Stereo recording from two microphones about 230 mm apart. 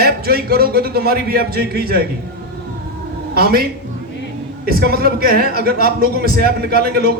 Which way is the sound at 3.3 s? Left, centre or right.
Right.